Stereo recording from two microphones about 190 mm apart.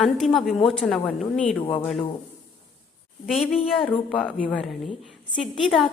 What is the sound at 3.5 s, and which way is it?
A woman's voice, centre (ahead or behind).